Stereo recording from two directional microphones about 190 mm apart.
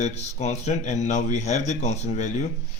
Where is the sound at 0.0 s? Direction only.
35° left (ahead or behind).